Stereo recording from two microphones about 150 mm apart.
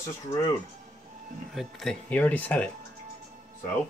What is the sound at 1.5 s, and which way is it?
Speech, centre (ahead or behind).